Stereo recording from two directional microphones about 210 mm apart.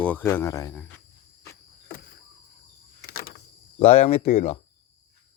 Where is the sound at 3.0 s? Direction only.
45° left (ahead or behind).